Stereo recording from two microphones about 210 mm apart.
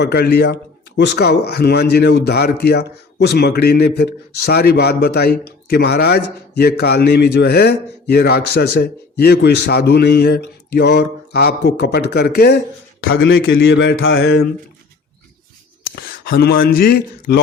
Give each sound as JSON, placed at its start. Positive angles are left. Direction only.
{"t": 0.0, "sound": "speech", "side_deg": 50}
{"t": 13.1, "sound": "speech", "side_deg": 65}
{"t": 16.0, "sound": "speech", "side_deg": 45}